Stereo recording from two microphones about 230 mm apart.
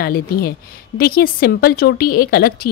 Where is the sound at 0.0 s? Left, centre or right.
Left.